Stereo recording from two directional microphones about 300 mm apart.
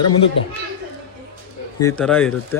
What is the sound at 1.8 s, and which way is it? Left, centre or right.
Speech, centre.